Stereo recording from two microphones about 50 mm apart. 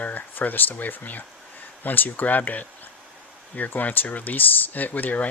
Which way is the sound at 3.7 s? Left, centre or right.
Left.